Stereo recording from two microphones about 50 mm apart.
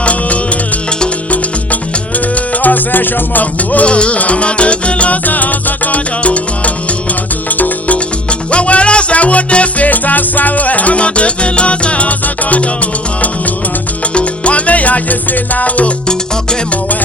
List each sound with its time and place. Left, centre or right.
0.0 s music: left
1.3 s music: left
7.6 s music: left
14.1 s salsa music: left
16.0 s music: centre